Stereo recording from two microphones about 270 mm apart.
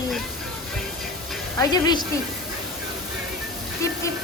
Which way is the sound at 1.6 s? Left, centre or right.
Centre.